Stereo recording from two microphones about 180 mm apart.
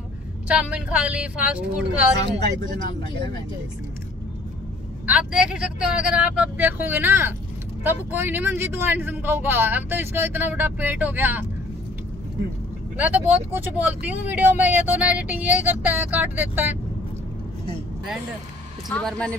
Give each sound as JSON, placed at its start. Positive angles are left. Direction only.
{"t": 0.5, "sound": "speech", "side_deg": -5}
{"t": 5.0, "sound": "speech", "side_deg": -5}
{"t": 12.9, "sound": "speech", "side_deg": -10}
{"t": 18.9, "sound": "speech", "side_deg": 5}